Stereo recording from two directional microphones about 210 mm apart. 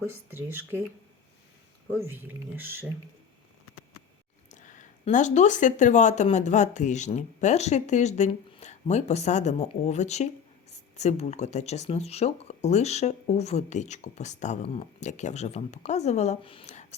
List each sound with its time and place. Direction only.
0.0 s speech: 10° right (ahead or behind)
2.0 s speech: 10° right (ahead or behind)
4.4 s speech: 35° left (ahead or behind)